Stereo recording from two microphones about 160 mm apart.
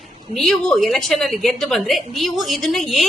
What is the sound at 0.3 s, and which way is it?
A woman's voice, centre (ahead or behind).